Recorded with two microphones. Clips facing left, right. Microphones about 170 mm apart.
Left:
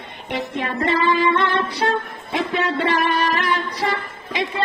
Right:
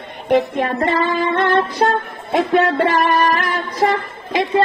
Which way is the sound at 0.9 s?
50° right (ahead or behind).